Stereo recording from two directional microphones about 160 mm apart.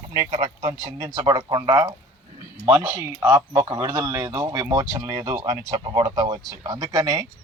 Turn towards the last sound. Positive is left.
turn(degrees=-20)  # may be behind; listen again after turning